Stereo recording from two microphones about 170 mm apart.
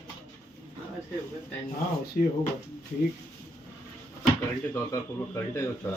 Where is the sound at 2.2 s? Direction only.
55° left (ahead or behind).